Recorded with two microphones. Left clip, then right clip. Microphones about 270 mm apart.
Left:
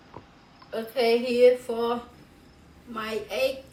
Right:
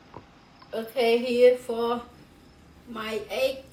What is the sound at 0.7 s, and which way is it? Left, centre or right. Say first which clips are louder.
Speech: even; centre.